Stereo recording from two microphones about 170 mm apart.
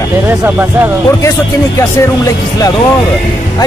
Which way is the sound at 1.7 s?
20° left (ahead or behind).